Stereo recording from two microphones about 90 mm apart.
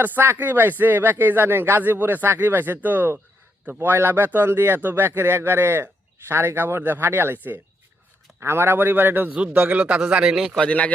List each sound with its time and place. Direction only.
0.0 s speech: 20° right (ahead or behind)
8.4 s speech: 30° right (ahead or behind); by 10.5 s 10° right (ahead or behind)
10.5 s speech: 10° left (ahead or behind)